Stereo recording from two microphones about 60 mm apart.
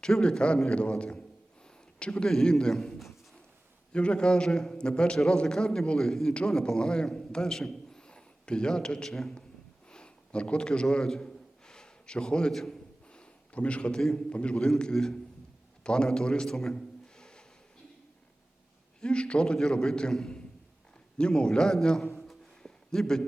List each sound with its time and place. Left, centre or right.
0.0 s a man's voice: centre
3.9 s a man's voice: centre
9.9 s gasp: centre
14.3 s a man's voice: centre
18.9 s a man's voice: centre
22.6 s a sound: centre